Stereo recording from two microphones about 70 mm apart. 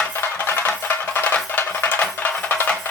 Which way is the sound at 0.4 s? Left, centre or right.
Left.